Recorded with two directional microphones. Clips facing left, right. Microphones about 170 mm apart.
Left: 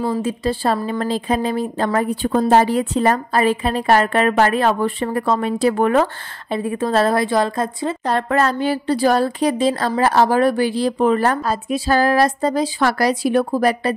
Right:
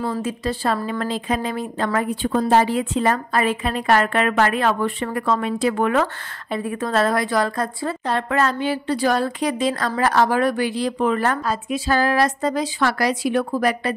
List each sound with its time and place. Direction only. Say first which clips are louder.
0.2 s a woman's voice: left 3 dB; 30° left (ahead or behind)
8.1 s speech: left 3 dB; 40° left (ahead or behind)